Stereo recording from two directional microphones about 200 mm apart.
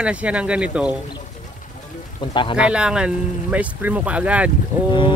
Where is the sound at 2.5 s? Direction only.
5° right (ahead or behind).